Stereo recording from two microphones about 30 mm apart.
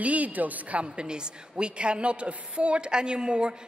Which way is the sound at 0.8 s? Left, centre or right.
Right.